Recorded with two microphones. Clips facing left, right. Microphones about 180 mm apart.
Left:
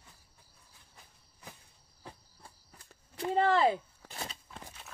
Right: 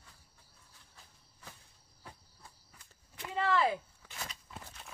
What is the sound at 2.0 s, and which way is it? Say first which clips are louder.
Cricket: left 3 dB; 30° left (ahead or behind).